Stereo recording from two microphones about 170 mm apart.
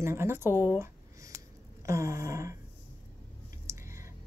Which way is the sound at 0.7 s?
15° right (ahead or behind).